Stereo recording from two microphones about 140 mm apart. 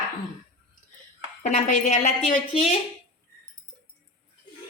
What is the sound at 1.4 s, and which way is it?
Speech, 60° left (ahead or behind).